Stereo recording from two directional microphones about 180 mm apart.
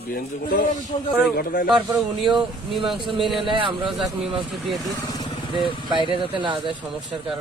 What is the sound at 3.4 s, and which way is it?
Speech, 30° right (ahead or behind).